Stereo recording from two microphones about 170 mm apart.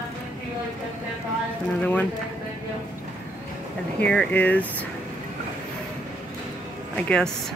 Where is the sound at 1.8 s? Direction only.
10° left (ahead or behind).